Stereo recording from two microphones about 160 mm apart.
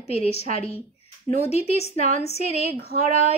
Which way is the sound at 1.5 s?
40° left (ahead or behind).